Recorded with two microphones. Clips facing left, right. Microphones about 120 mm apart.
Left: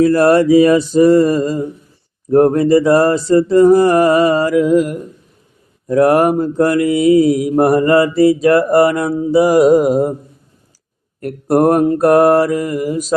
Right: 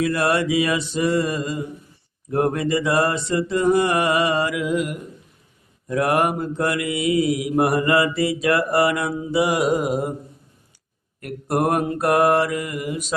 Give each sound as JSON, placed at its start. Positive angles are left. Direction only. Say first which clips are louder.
{"t": 0.0, "sound": "mantra", "louder": "left 10 dB", "side_deg": 40}
{"t": 11.2, "sound": "mantra", "louder": "left 9 dB", "side_deg": 40}